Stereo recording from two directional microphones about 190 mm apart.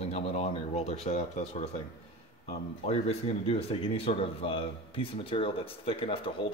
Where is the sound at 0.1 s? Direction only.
35° left (ahead or behind).